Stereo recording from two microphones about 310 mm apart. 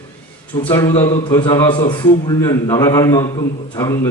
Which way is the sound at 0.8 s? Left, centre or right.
Centre.